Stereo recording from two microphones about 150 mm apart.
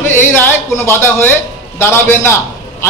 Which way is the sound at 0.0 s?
15° left (ahead or behind).